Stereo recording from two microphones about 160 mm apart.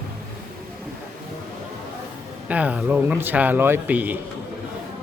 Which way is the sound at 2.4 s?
10° right (ahead or behind).